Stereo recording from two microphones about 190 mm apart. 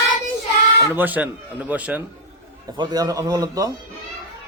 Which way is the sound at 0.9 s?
10° right (ahead or behind).